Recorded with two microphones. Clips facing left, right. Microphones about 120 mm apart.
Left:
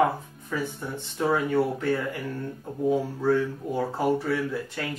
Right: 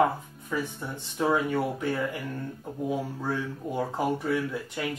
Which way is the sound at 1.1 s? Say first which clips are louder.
Left 2 dB; 15° right (ahead or behind).